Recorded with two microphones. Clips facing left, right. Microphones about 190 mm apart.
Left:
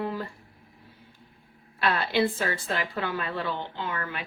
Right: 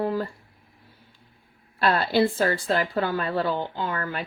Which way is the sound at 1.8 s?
40° right (ahead or behind).